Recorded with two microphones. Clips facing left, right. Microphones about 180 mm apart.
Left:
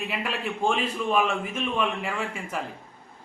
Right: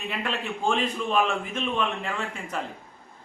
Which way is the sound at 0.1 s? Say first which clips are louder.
Even; 5° left (ahead or behind).